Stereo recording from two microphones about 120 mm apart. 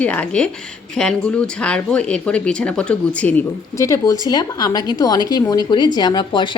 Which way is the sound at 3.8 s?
25° left (ahead or behind).